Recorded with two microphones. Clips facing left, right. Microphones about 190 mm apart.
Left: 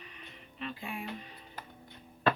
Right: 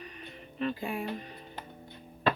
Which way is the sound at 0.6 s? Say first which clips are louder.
Right 7 dB; 40° right (ahead or behind).